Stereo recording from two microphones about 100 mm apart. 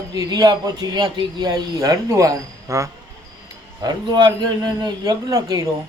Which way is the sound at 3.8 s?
45° right (ahead or behind).